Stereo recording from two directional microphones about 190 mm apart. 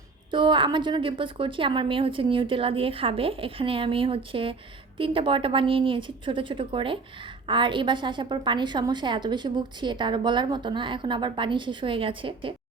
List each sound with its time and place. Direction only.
0.3 s a woman's voice: 25° right (ahead or behind)